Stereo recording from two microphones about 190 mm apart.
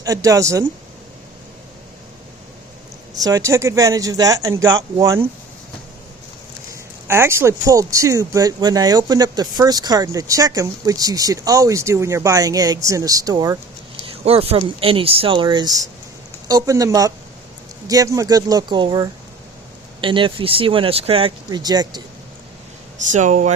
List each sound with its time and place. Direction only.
0.0 s speech: 20° right (ahead or behind)
3.2 s speech: 20° right (ahead or behind)
7.1 s speech: 15° right (ahead or behind)
14.0 s a sound: 30° right (ahead or behind)
14.8 s speech: 30° right (ahead or behind)
23.1 s speech: 40° right (ahead or behind)